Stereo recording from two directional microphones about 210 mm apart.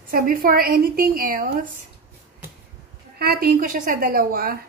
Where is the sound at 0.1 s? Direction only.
45° right (ahead or behind).